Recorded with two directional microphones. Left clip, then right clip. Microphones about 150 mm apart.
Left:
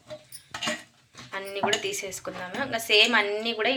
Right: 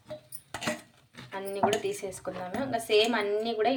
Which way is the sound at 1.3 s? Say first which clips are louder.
Left 1 dB; 20° right (ahead or behind).